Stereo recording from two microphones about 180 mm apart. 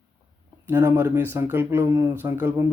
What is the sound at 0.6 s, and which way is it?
Speech, 15° right (ahead or behind).